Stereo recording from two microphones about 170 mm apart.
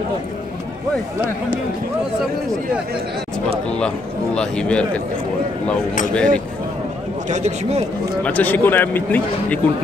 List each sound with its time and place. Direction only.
3.7 s a man's voice: 5° left (ahead or behind)
6.1 s a man's voice: 5° left (ahead or behind)
7.2 s a man's voice: 40° right (ahead or behind)
8.2 s speech: 10° left (ahead or behind)